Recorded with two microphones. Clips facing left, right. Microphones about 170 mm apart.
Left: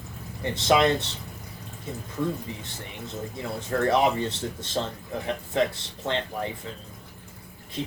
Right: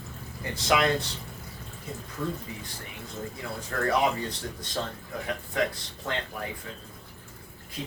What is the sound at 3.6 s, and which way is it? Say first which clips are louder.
Speech: left 4 dB; 25° left (ahead or behind).